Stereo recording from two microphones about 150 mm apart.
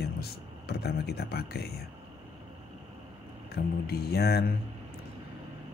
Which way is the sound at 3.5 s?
90° left.